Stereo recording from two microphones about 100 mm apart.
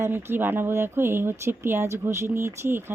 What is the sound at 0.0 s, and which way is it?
Speech, 25° right (ahead or behind).